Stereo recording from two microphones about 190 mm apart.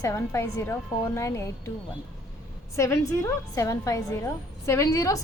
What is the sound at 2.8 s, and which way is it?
A woman's voice, 15° left (ahead or behind).